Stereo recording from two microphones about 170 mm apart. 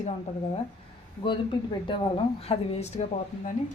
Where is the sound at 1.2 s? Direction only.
30° left (ahead or behind).